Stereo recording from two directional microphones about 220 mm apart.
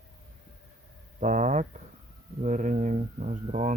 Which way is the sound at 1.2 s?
35° right (ahead or behind).